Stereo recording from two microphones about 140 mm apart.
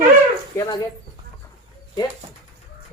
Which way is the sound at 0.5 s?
25° left (ahead or behind).